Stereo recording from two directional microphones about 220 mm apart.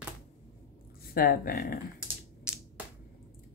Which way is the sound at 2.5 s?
5° right (ahead or behind).